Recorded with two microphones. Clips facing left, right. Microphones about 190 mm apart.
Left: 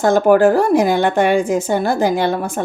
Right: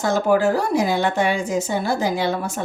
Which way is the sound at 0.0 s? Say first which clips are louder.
Left 6 dB; 55° left (ahead or behind).